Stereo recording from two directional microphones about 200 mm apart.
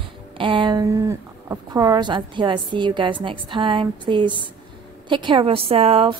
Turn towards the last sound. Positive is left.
turn(degrees=-30)  # may be behind; listen again after turning